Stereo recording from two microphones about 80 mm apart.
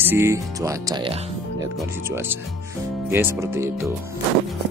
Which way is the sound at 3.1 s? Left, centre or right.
Right.